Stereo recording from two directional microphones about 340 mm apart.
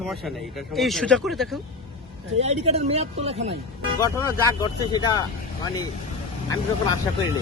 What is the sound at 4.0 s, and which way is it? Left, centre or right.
Speech, centre.